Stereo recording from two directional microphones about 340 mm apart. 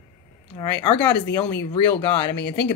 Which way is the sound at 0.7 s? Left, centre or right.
Left.